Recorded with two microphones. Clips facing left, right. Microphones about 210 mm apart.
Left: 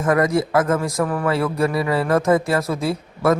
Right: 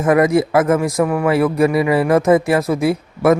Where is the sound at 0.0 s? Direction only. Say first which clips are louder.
Right 5 dB; 20° right (ahead or behind).